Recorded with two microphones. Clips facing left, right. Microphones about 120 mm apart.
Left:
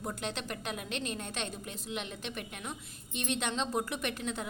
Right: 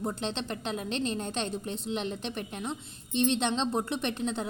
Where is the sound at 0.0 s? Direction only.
25° right (ahead or behind).